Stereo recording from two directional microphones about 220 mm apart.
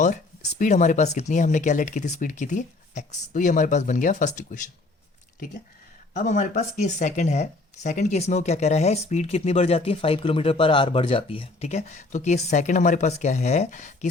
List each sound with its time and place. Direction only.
0.6 s speech: 35° left (ahead or behind)
6.1 s speech: 35° left (ahead or behind)